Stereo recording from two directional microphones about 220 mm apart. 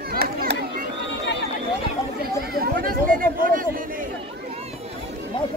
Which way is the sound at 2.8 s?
40° right (ahead or behind).